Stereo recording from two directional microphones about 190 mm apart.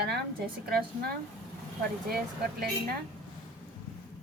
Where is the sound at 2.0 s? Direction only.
55° right (ahead or behind).